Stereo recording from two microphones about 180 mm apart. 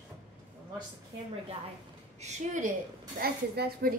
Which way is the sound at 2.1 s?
40° right (ahead or behind).